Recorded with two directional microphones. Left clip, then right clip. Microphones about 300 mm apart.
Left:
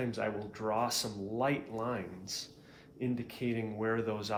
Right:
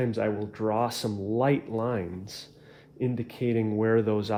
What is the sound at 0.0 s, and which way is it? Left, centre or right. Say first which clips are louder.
Speech: right 8 dB; right.